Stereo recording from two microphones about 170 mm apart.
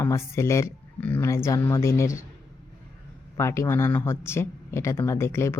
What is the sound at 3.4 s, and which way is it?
Speech, 15° left (ahead or behind).